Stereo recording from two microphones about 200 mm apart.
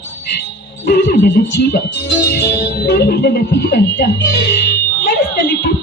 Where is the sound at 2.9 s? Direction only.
55° left (ahead or behind).